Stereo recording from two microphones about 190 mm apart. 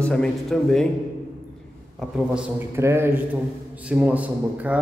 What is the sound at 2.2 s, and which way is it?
A man's voice, 5° right (ahead or behind).